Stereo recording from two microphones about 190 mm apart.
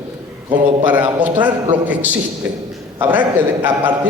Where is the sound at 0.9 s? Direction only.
10° right (ahead or behind).